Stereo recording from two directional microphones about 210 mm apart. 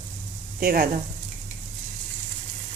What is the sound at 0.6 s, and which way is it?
Speech, 45° right (ahead or behind).